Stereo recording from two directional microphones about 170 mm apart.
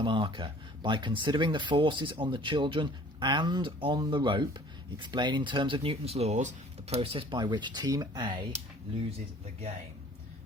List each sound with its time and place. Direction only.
0.0 s speech: 30° right (ahead or behind)